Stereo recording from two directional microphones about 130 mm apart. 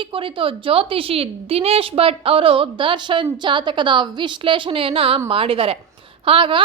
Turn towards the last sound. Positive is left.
turn(degrees=-40)  # may be behind; listen again after turning